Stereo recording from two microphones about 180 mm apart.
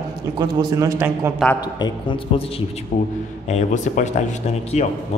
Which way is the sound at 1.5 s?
25° left (ahead or behind).